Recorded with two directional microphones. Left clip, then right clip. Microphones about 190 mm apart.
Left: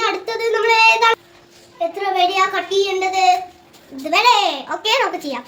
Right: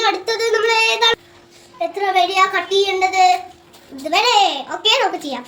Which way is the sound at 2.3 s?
10° left (ahead or behind).